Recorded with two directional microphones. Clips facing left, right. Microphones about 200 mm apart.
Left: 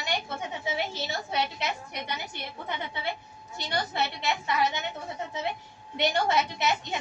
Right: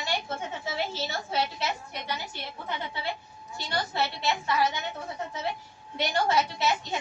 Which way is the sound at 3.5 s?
20° left (ahead or behind).